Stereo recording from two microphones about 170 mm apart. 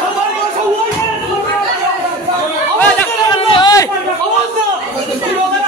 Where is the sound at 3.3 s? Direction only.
30° left (ahead or behind).